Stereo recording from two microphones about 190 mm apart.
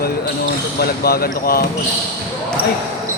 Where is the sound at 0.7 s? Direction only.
55° left (ahead or behind).